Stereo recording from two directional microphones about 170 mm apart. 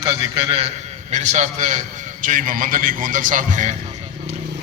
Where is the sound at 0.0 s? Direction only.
30° right (ahead or behind).